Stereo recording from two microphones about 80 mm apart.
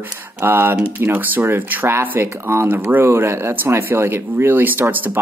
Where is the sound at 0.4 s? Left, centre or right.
Right.